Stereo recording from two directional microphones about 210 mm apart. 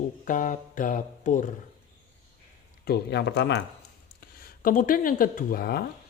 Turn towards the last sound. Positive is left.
turn(degrees=45)  # may be behind; listen again after turning